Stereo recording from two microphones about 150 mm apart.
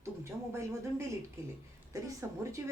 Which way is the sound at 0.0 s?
20° right (ahead or behind).